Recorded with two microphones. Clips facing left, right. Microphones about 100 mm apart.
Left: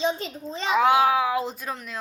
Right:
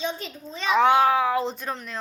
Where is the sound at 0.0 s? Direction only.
30° left (ahead or behind).